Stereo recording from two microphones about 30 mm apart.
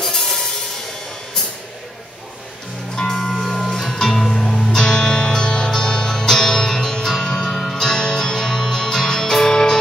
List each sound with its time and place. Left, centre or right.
0.0 s music: centre
3.0 s music: left
3.3 s music: centre
4.6 s music: left